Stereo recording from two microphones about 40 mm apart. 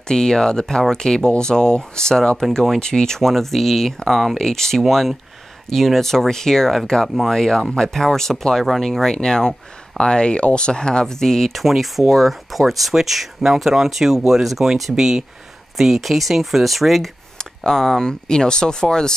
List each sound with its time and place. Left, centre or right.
0.1 s speech: centre
11.5 s speech: centre
17.4 s speech: centre